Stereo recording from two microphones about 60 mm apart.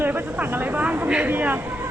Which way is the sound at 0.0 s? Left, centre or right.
Right.